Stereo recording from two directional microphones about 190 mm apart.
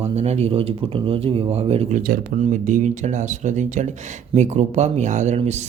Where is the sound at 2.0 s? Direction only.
50° right (ahead or behind).